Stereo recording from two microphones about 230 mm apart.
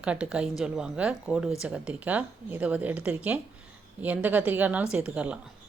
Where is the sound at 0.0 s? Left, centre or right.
Centre.